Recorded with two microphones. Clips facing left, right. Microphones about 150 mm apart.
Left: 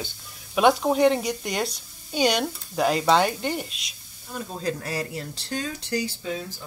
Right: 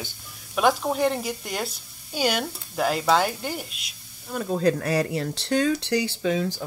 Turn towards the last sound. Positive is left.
turn(degrees=-80)